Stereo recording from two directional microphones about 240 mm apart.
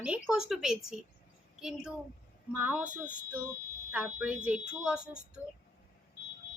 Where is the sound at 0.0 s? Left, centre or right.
Centre.